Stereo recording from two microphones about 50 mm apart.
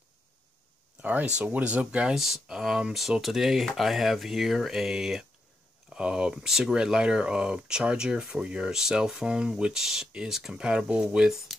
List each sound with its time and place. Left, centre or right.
1.4 s speech: right
2.1 s speech: centre